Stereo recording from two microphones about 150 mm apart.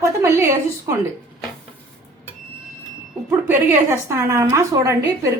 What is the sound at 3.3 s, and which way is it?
A woman's voice, 15° right (ahead or behind).